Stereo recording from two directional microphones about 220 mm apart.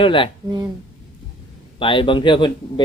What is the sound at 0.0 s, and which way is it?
Speech, 25° left (ahead or behind).